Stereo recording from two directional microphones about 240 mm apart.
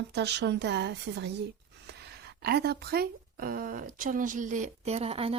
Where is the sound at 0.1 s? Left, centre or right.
Right.